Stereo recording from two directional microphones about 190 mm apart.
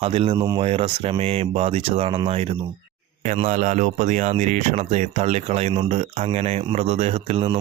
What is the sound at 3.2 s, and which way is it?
Speech, 40° right (ahead or behind).